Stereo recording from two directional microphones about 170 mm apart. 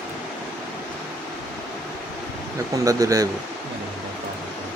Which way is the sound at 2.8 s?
20° right (ahead or behind).